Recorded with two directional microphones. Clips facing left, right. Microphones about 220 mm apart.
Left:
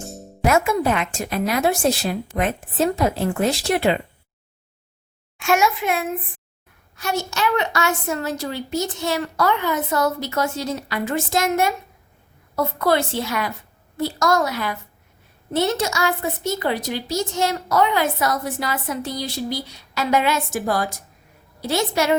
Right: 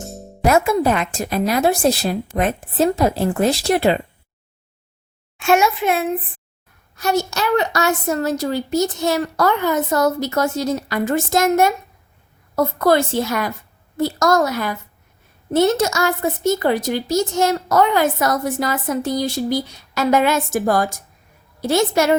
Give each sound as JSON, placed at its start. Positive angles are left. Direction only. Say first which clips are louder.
{"t": 0.4, "sound": "a woman's voice", "louder": "right 3 dB", "side_deg": -35}
{"t": 5.4, "sound": "a sound", "louder": "right 4 dB", "side_deg": 0}
{"t": 6.9, "sound": "a woman's voice", "louder": "right 5 dB", "side_deg": -40}